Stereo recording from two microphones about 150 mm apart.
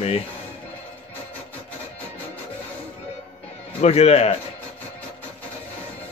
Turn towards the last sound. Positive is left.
turn(degrees=45)  # may be behind; listen again after turning